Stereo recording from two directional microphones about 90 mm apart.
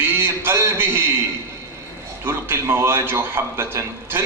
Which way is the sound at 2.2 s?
25° right (ahead or behind).